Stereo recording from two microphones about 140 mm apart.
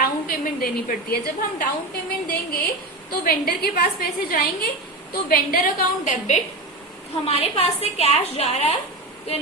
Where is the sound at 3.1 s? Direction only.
90° left; by 6.4 s 60° left (ahead or behind).